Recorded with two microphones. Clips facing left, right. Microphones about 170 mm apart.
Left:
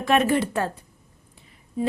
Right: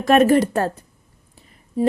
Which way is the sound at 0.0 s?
45° right (ahead or behind).